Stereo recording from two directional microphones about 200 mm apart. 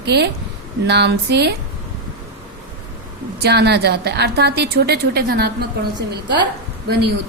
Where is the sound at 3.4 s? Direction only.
55° right (ahead or behind).